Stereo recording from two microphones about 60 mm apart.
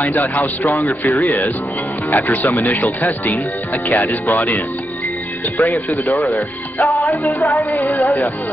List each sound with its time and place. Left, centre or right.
0.0 s speech: left
5.7 s speech: left
6.8 s music: left
7.7 s speech: left